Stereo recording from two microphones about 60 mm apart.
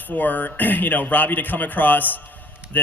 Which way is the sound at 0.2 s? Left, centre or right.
Left.